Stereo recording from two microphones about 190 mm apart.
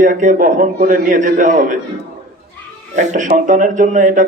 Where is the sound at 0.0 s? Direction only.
45° right (ahead or behind).